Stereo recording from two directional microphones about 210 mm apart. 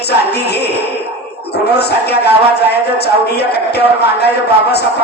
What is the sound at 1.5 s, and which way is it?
Speech, 50° left (ahead or behind).